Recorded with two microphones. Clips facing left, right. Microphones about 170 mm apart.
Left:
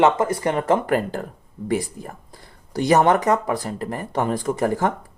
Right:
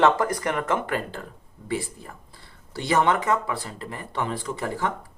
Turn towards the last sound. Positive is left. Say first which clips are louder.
# left 7 dB
turn(degrees=45)  # may be behind; listen again after turning